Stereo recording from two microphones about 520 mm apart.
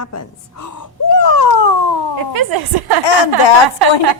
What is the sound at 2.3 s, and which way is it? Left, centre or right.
Speech, right.